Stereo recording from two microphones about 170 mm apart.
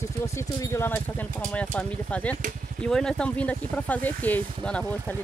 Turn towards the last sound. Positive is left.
turn(degrees=5)  # may be behind; listen again after turning